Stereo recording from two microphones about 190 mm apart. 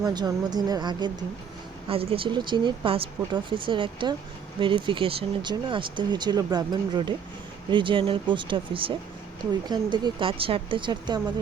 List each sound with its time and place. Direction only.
0.0 s speech: 20° right (ahead or behind)